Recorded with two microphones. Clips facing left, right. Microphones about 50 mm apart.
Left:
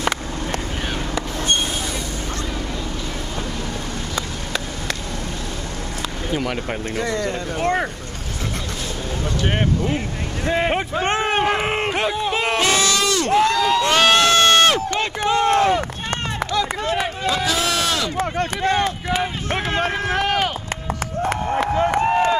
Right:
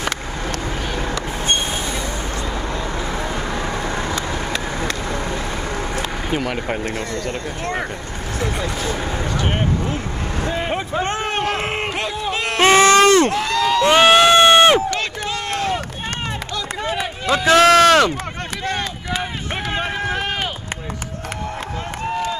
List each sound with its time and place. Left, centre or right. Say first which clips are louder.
6.4 s speech: right 2 dB; centre
7.1 s speech: left 2 dB; left
10.5 s a man's voice: left 4 dB; left
11.7 s a sound: left 2 dB; centre
12.5 s a sound: right 11 dB; right
13.3 s speech: left 2 dB; centre
13.8 s a sound: right 6 dB; centre
14.9 s speech: left 3 dB; left
17.5 s speech: right 10 dB; right
18.6 s speech: left 4 dB; left
19.8 s speech: left 2 dB; left
21.5 s a sound: left 9 dB; left